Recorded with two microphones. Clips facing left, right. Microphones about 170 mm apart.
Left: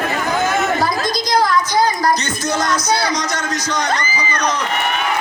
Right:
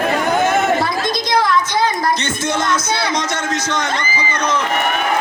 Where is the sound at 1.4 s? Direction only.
25° right (ahead or behind).